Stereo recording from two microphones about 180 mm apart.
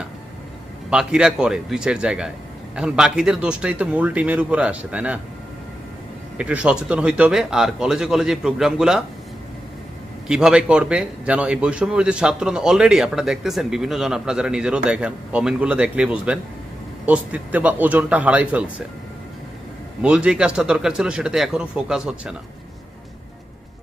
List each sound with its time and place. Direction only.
0.9 s a man's voice: 5° right (ahead or behind)
6.3 s a man's voice: 5° right (ahead or behind)
10.2 s a man's voice: 5° right (ahead or behind)
20.0 s a man's voice: 5° right (ahead or behind)